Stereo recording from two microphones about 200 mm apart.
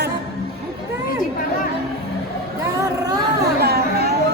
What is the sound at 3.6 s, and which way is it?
Chatter, 50° right (ahead or behind).